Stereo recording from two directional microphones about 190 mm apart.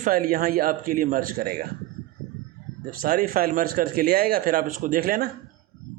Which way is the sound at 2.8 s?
45° right (ahead or behind).